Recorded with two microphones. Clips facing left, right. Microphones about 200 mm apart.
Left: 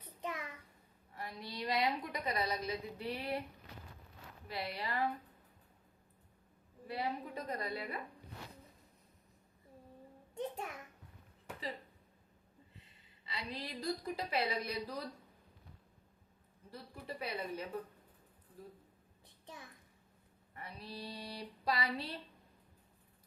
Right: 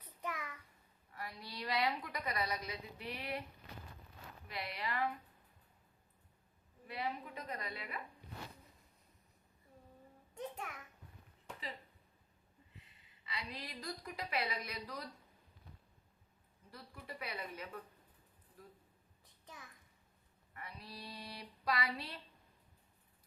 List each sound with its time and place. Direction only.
0.0 s child singing: 25° left (ahead or behind)
1.1 s a woman's voice: 25° left (ahead or behind)
4.4 s a woman's voice: 35° left (ahead or behind)
6.8 s a woman's voice: 35° left (ahead or behind)
11.5 s a sound: 5° left (ahead or behind)
13.2 s a woman's voice: 30° left (ahead or behind)
16.7 s a woman's voice: 30° left (ahead or behind)
19.2 s a sound: 30° left (ahead or behind)
20.5 s a woman's voice: 30° left (ahead or behind)